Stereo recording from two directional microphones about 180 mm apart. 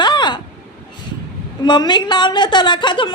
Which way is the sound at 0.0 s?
25° left (ahead or behind).